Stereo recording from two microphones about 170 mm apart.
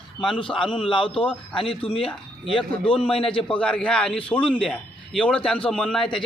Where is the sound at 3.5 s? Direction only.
5° left (ahead or behind).